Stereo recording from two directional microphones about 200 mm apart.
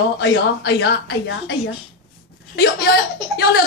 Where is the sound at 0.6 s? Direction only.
55° left (ahead or behind).